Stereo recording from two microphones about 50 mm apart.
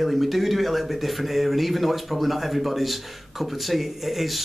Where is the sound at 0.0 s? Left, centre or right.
Centre.